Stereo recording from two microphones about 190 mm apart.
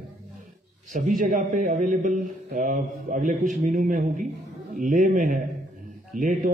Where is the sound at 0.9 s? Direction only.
45° right (ahead or behind).